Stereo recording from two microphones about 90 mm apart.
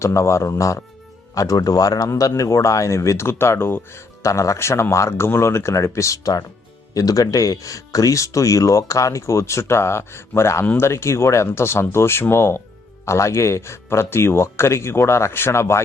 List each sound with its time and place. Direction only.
0.0 s speech: 30° left (ahead or behind)